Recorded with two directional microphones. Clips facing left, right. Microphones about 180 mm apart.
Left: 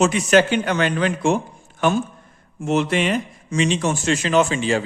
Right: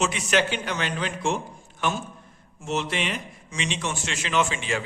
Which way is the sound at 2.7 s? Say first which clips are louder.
Left 8 dB; 50° left (ahead or behind).